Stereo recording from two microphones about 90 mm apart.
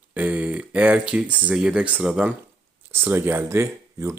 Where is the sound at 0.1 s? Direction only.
15° right (ahead or behind).